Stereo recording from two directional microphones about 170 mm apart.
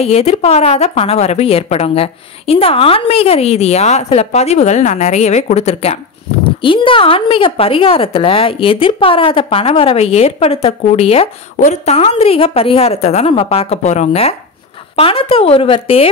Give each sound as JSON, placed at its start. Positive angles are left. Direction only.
{"t": 0.0, "sound": "a woman's voice", "side_deg": 35}